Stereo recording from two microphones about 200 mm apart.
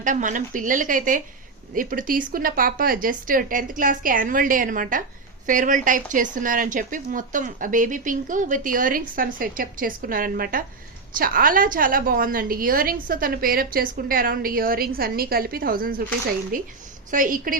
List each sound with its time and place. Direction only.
0.0 s a woman's voice: 40° right (ahead or behind)